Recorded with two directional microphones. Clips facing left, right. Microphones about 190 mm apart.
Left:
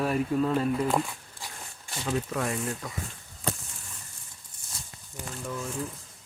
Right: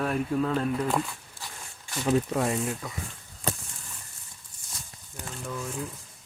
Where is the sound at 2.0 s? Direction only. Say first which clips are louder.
Right 5 dB; 25° right (ahead or behind).